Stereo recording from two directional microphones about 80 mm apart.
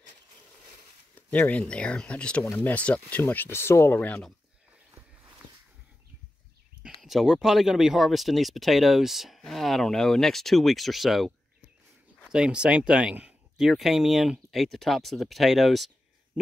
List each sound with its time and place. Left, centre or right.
1.1 s speech: centre
7.0 s speech: centre
13.7 s speech: centre